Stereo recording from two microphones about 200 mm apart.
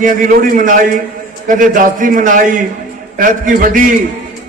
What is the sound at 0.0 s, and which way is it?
A man's voice, 40° right (ahead or behind).